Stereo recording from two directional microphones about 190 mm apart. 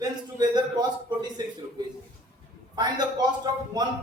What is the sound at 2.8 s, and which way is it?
Speech, 20° right (ahead or behind).